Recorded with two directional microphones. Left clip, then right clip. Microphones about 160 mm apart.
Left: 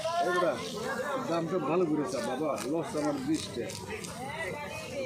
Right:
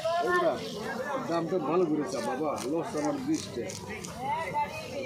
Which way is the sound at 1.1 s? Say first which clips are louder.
Right 3 dB; 15° left (ahead or behind).